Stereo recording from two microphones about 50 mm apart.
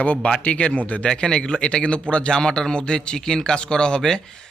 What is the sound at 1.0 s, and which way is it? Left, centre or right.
A man's voice, centre.